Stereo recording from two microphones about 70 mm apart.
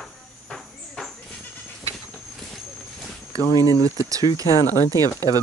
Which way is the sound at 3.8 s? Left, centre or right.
Right.